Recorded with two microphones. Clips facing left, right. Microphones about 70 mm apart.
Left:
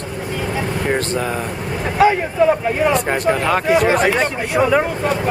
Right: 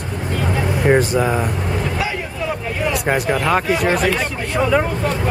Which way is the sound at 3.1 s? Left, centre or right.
Centre.